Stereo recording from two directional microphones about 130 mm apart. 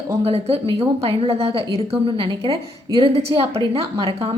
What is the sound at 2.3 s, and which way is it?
Speech, 30° right (ahead or behind).